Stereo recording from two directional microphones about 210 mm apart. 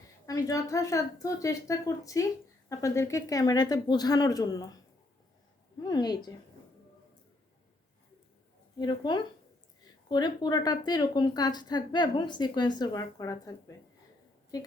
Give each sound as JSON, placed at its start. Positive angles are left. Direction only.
{"t": 0.3, "sound": "speech", "side_deg": 15}
{"t": 5.8, "sound": "speech", "side_deg": 20}
{"t": 8.8, "sound": "speech", "side_deg": 20}
{"t": 14.5, "sound": "speech", "side_deg": 20}